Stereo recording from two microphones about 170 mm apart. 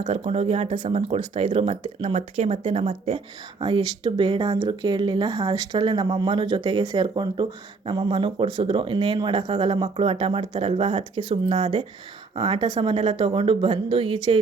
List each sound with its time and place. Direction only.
0.0 s speech: 35° right (ahead or behind)
3.6 s speech: 30° right (ahead or behind)